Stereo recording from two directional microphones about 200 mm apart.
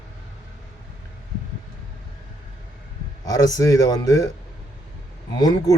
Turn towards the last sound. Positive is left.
turn(degrees=20)  # may be behind; listen again after turning